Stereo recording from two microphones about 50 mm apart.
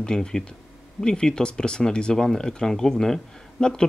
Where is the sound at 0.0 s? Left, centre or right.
Centre.